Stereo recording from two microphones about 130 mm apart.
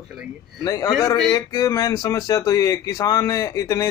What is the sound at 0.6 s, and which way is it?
Speech, 30° left (ahead or behind).